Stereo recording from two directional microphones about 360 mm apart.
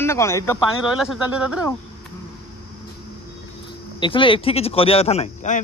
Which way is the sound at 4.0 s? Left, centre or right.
Centre.